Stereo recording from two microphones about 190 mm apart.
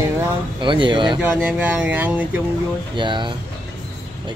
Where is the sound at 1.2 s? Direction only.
5° right (ahead or behind).